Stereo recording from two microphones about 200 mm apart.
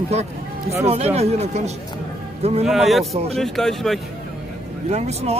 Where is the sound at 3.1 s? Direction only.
30° right (ahead or behind).